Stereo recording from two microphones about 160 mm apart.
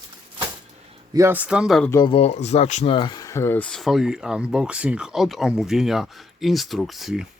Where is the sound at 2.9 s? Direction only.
25° left (ahead or behind); by 7.2 s centre (ahead or behind).